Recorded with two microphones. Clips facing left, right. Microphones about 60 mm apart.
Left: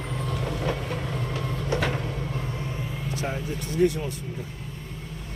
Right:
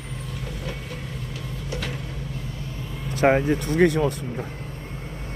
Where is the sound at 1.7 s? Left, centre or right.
Left.